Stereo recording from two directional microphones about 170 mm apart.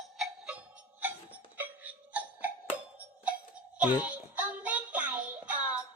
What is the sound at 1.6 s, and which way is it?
Music, 10° right (ahead or behind).